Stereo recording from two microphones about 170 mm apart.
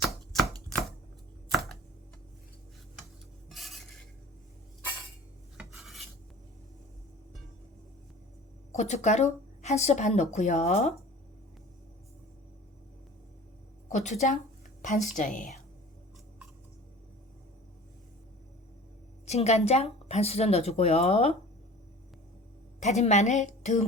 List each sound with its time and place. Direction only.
0.0 s chopping: centre (ahead or behind)
3.5 s stir: centre (ahead or behind)
5.5 s cutlery: centre (ahead or behind)
8.7 s speech: 40° left (ahead or behind)
13.8 s a woman's voice: 45° left (ahead or behind)
14.8 s a sound: 45° left (ahead or behind)
15.1 s a woman's voice: 50° left (ahead or behind)
19.2 s speech: 40° left (ahead or behind)
22.8 s a woman's voice: 40° left (ahead or behind)